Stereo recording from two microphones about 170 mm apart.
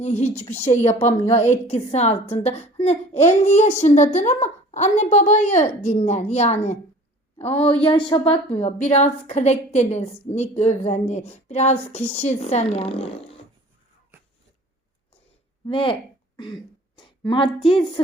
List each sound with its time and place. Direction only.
0.0 s a woman's voice: 40° left (ahead or behind)
15.7 s a woman's voice: 30° left (ahead or behind)
17.0 s a sound: 30° left (ahead or behind)
17.7 s speech: 30° left (ahead or behind)